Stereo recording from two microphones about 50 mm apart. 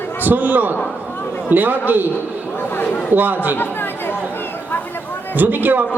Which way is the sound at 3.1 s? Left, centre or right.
Right.